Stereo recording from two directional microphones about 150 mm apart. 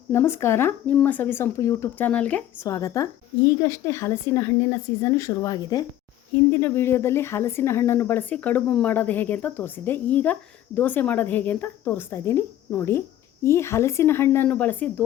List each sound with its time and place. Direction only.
0.1 s speech: 15° left (ahead or behind)
2.6 s a woman's voice: 20° left (ahead or behind)